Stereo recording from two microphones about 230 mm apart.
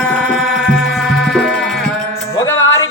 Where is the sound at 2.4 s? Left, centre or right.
Centre.